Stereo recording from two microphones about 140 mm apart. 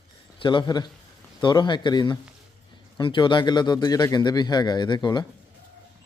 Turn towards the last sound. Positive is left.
turn(degrees=35)  # may be behind; listen again after turning